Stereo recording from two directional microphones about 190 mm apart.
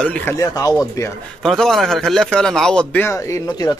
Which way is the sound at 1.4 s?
Centre (ahead or behind).